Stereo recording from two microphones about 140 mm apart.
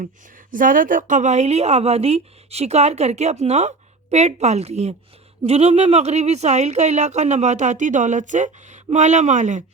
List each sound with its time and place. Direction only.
0.0 s a woman's voice: 75° right (ahead or behind)